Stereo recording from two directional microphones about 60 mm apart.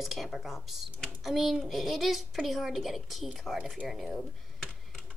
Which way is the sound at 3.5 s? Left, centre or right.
Centre.